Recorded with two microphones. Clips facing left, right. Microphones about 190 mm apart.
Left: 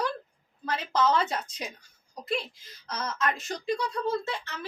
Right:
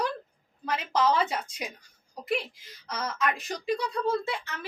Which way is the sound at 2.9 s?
10° right (ahead or behind).